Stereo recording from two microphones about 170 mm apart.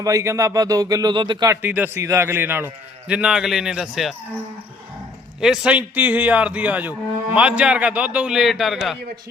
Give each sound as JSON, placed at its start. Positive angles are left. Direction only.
{"t": 0.0, "sound": "speech", "side_deg": -20}
{"t": 1.6, "sound": "a man's voice", "side_deg": -10}
{"t": 5.4, "sound": "a man's voice", "side_deg": -5}